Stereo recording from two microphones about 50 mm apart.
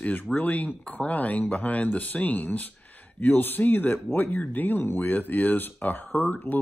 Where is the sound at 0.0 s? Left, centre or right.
Left.